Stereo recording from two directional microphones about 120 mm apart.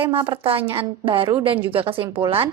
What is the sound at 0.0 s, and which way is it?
A woman's voice, 50° right (ahead or behind).